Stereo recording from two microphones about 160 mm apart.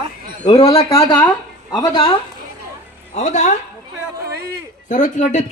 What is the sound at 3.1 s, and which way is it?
Speech, 45° left (ahead or behind).